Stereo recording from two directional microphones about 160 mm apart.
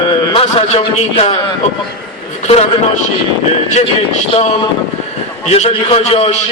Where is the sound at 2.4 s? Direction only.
40° left (ahead or behind).